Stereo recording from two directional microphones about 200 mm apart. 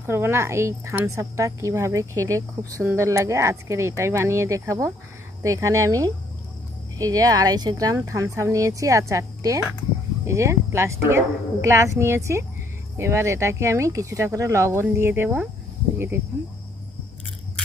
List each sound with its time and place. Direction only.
0.0 s speech: 10° right (ahead or behind)